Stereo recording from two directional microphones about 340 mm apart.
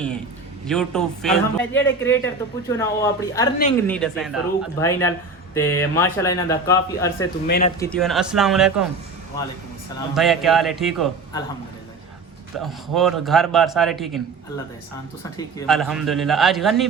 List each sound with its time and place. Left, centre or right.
0.7 s a man's voice: centre
7.4 s speech: left
7.8 s a man's voice: centre
10.2 s a man's voice: centre
12.5 s a man's voice: centre
15.4 s a man's voice: centre